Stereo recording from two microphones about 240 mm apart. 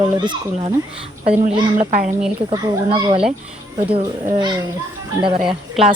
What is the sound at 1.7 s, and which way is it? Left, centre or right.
Speech, right.